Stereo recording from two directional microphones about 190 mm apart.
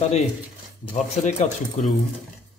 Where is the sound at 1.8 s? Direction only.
40° left (ahead or behind).